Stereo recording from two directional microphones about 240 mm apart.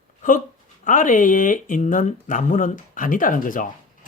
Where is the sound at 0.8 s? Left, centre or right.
Left.